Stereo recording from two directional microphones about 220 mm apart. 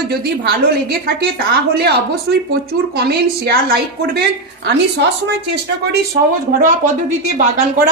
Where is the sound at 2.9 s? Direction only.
45° right (ahead or behind).